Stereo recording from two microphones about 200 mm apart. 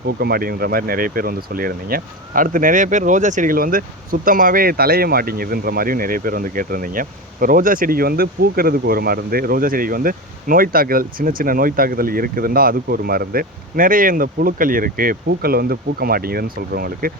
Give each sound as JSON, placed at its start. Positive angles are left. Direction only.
{"t": 0.2, "sound": "speech", "side_deg": -50}